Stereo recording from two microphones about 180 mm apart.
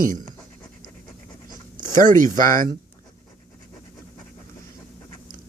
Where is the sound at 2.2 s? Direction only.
50° right (ahead or behind).